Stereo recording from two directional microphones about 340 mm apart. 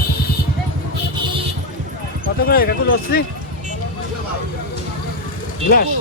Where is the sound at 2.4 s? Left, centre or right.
Left.